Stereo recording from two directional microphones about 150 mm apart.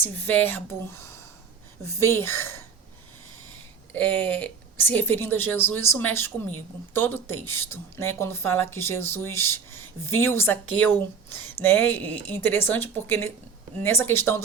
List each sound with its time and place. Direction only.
0.0 s speech: 15° left (ahead or behind)
3.9 s speech: 10° left (ahead or behind)